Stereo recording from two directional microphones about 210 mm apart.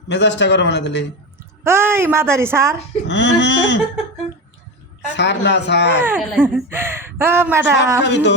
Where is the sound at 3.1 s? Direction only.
55° left (ahead or behind).